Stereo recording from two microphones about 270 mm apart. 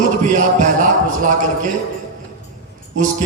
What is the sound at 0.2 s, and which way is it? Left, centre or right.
Music, right.